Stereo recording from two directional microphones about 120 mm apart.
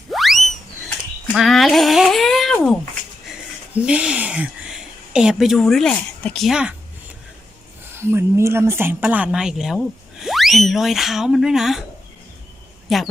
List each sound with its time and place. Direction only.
0.1 s a sound: centre (ahead or behind)
1.3 s speech: centre (ahead or behind)
3.8 s a woman's voice: 10° right (ahead or behind)
7.9 s speech: 20° right (ahead or behind); by 11.9 s 5° right (ahead or behind)
12.9 s speech: centre (ahead or behind)